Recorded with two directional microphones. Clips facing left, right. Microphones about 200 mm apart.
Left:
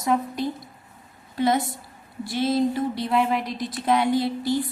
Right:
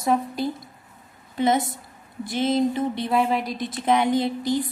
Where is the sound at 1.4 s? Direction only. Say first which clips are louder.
Right 1 dB; 20° right (ahead or behind).